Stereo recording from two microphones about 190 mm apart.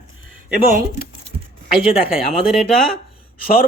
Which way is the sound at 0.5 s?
45° right (ahead or behind).